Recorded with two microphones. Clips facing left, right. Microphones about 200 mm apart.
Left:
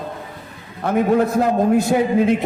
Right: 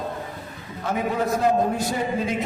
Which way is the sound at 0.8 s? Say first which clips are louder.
Left 7 dB; 55° left (ahead or behind).